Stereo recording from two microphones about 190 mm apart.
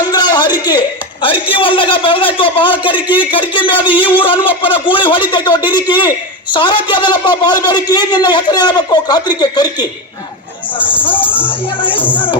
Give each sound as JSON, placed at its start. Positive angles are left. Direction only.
{"t": 0.1, "sound": "a sound", "side_deg": 20}
{"t": 1.2, "sound": "a man's voice", "side_deg": 25}
{"t": 10.8, "sound": "speech", "side_deg": 10}
{"t": 11.4, "sound": "a man's voice", "side_deg": 25}